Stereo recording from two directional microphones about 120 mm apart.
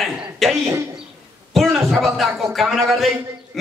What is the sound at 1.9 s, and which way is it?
A man's voice, centre (ahead or behind).